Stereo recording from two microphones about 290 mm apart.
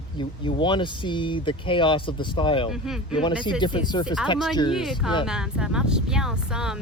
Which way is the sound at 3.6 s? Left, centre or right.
Centre.